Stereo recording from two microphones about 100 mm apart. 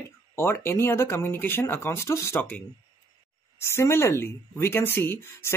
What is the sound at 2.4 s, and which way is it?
Speech, 15° left (ahead or behind).